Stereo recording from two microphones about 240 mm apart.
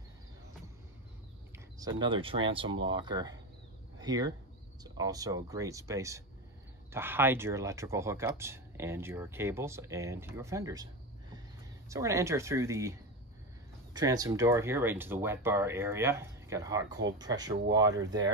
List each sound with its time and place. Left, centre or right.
1.8 s speech: centre
11.9 s speech: centre
13.9 s speech: centre